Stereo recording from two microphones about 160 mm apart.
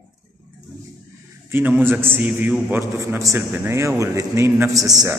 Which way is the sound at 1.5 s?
10° right (ahead or behind).